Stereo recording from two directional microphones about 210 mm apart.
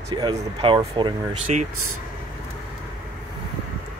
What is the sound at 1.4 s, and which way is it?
Speech, 35° right (ahead or behind).